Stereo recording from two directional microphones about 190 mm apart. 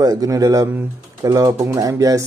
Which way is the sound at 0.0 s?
20° right (ahead or behind).